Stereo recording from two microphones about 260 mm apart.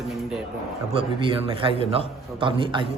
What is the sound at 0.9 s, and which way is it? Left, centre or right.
A man's voice, centre.